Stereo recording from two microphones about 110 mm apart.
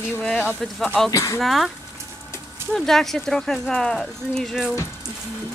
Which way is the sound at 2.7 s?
5° left (ahead or behind).